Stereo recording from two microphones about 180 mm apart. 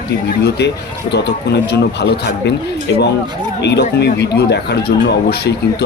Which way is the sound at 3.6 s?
70° left (ahead or behind).